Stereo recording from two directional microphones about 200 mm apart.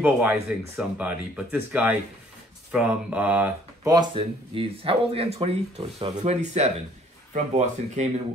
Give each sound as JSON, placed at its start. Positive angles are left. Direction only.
{"t": 0.0, "sound": "speech", "side_deg": -5}
{"t": 3.9, "sound": "speech", "side_deg": -25}